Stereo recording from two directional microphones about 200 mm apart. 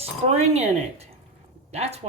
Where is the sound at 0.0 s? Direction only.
30° right (ahead or behind).